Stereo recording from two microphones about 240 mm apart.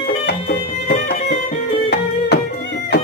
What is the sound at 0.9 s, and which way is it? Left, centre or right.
Music, left.